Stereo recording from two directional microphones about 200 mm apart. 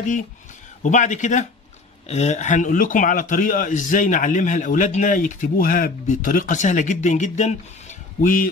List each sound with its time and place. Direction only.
0.8 s a man's voice: 35° left (ahead or behind)